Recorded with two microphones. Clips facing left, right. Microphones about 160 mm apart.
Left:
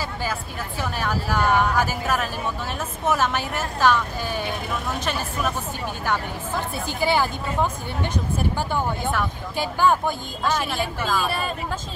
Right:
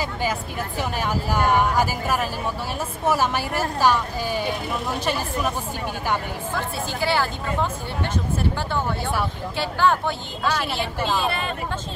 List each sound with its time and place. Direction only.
0.0 s speech: 15° right (ahead or behind)
6.9 s speech: 15° left (ahead or behind)